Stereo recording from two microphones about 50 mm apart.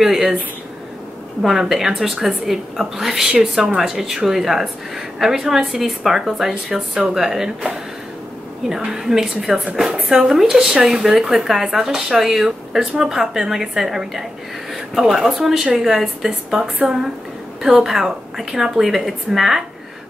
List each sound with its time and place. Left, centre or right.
0.0 s speech: centre
1.4 s a woman's voice: centre
3.3 s speech: centre
3.7 s speech: centre